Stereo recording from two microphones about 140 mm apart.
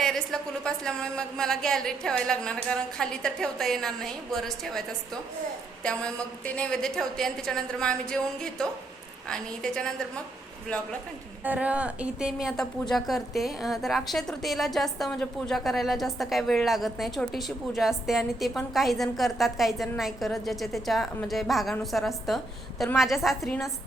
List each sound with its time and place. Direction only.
0.0 s a woman's voice: 5° left (ahead or behind)
11.4 s a woman's voice: 10° right (ahead or behind)